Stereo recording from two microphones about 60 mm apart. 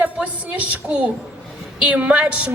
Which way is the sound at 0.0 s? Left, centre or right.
Right.